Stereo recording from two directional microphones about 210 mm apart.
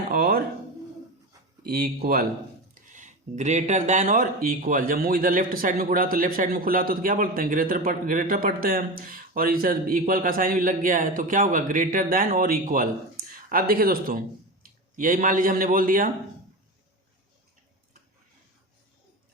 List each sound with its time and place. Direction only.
0.1 s a sound: 45° right (ahead or behind)
1.6 s speech: 50° right (ahead or behind)
2.7 s speech: 35° right (ahead or behind)